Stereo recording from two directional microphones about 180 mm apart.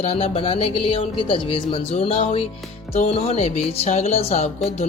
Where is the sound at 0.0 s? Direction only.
35° left (ahead or behind).